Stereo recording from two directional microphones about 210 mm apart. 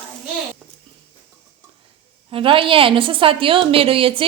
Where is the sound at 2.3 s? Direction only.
25° right (ahead or behind).